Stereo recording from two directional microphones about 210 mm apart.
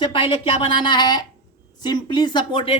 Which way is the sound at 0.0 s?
25° left (ahead or behind).